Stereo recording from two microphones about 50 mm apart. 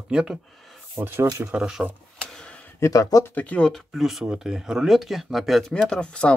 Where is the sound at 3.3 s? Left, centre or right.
Left.